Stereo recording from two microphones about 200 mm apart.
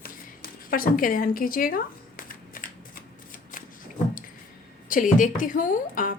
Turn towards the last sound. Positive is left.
turn(degrees=45)  # may be behind; listen again after turning